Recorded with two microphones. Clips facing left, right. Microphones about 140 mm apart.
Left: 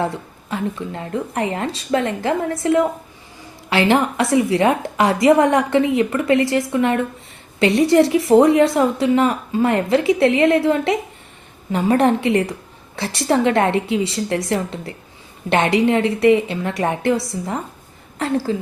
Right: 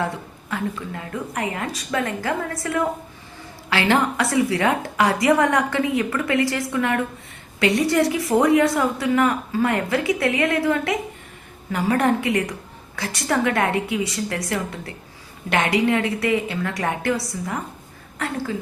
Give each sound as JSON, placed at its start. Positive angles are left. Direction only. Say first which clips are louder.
{"t": 0.5, "sound": "a woman's voice", "louder": "left 3 dB", "side_deg": 25}